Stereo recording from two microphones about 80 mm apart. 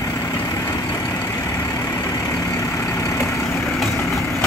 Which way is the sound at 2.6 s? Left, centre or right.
Left.